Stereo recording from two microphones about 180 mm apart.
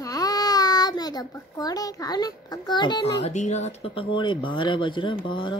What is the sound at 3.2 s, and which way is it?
Speech, 40° left (ahead or behind).